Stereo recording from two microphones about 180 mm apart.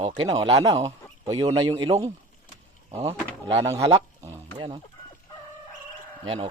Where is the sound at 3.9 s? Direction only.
25° right (ahead or behind).